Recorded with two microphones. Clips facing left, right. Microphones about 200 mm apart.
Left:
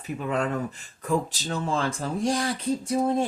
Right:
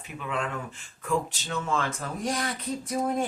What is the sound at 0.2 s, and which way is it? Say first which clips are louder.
Speech: left 5 dB; 40° left (ahead or behind).